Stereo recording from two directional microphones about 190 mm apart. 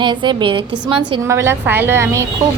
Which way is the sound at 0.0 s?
25° right (ahead or behind).